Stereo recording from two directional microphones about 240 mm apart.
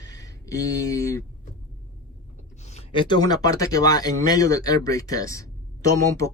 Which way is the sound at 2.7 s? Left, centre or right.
Left.